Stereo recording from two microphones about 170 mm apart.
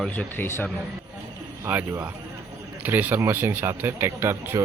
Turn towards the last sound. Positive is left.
turn(degrees=-15)  # may be behind; listen again after turning